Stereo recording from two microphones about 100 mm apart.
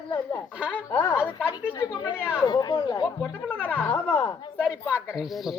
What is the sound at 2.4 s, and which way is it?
Speech, 40° left (ahead or behind).